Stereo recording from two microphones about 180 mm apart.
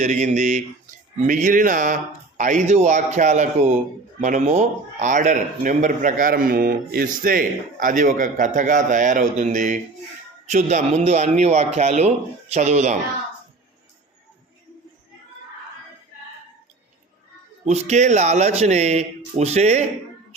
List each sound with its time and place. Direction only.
0.0 s a man's voice: 40° right (ahead or behind)
17.7 s a man's voice: 40° right (ahead or behind)